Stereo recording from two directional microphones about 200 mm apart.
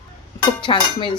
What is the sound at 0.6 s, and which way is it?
Speech, 25° left (ahead or behind).